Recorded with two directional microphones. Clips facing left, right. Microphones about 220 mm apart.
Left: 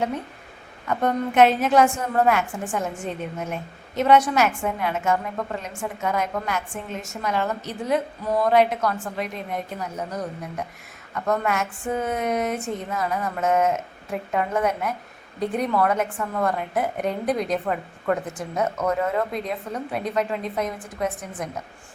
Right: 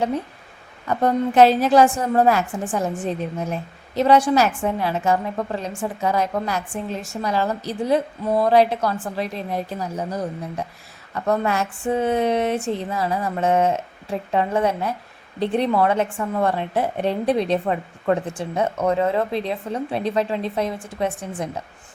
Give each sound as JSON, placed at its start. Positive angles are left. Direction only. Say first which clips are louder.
{"t": 0.9, "sound": "a woman's voice", "louder": "right 3 dB", "side_deg": -35}